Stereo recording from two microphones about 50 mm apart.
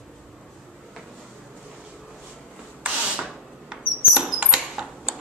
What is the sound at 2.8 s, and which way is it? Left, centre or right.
Mouse, right.